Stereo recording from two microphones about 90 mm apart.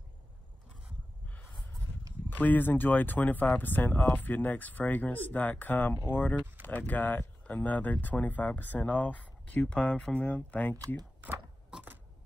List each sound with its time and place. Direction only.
2.2 s speech: 20° left (ahead or behind)
11.2 s speech: 20° right (ahead or behind)
11.7 s a sound: 10° right (ahead or behind)